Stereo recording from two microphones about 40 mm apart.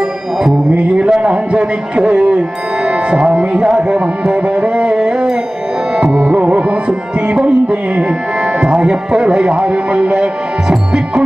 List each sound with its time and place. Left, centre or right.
0.7 s a sound: right
1.2 s a man's voice: right
6.0 s music: right
6.4 s music: right